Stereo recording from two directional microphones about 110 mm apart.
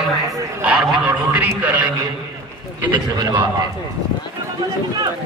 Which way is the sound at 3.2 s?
40° right (ahead or behind).